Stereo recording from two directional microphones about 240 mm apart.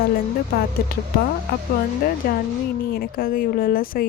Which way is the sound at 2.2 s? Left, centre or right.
Left.